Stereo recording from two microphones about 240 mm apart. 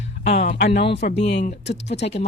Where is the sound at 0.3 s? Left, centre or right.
Left.